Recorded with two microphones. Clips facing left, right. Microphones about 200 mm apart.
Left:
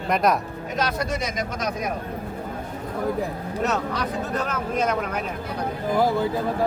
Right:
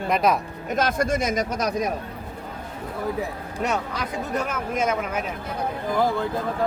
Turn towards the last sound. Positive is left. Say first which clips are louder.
# left 2 dB
turn(degrees=10)  # may be behind; listen again after turning